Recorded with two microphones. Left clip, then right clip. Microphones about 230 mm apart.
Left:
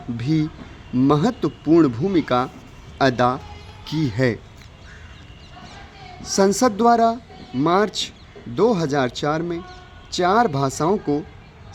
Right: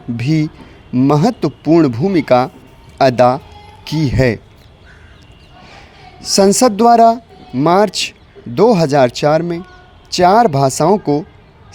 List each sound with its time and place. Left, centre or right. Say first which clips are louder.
0.2 s speech: right 5 dB; right
6.2 s speech: right 7 dB; right